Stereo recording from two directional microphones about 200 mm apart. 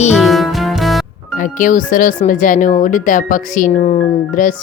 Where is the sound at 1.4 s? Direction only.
40° left (ahead or behind).